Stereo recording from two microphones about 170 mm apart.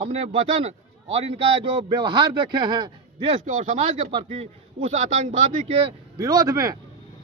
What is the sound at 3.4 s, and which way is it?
Speech, 50° right (ahead or behind).